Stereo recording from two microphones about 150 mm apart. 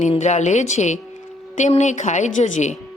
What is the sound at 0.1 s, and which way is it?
A woman's voice, 50° left (ahead or behind).